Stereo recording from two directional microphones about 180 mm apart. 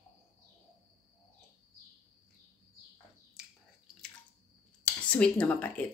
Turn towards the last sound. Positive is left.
turn(degrees=10)  # may be behind; listen again after turning